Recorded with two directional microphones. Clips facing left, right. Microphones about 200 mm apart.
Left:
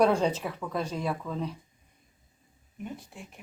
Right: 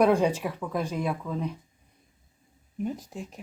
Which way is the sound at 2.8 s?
40° right (ahead or behind).